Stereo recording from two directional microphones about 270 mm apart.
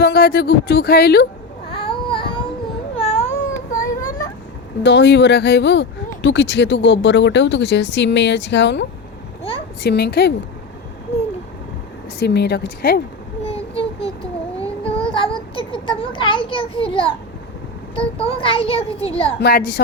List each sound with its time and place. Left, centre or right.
0.0 s speech: left
1.7 s child singing: centre
2.9 s baby cry: left
4.8 s speech: left
9.4 s a sound: centre
9.8 s speech: left
11.1 s a sound: left
12.2 s speech: left
13.4 s vehicle: left
14.6 s a sound: centre
17.9 s a child's voice: left
19.4 s speech: left